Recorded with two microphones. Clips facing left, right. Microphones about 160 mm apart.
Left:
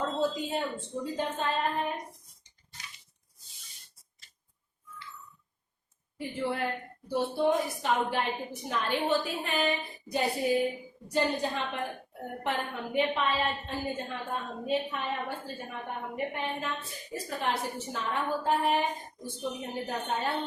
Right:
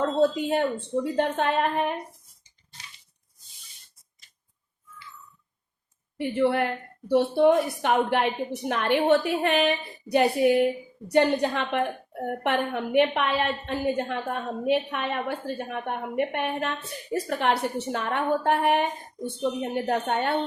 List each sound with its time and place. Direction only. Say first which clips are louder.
0.0 s a woman's voice: right 7 dB; 65° right (ahead or behind)
6.1 s a woman's voice: right 9 dB; 65° right (ahead or behind)